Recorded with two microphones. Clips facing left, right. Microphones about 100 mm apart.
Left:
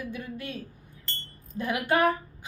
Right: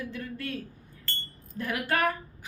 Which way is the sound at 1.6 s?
20° left (ahead or behind).